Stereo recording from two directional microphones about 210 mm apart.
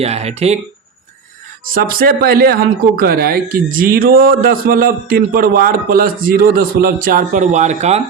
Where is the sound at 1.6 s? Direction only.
45° right (ahead or behind).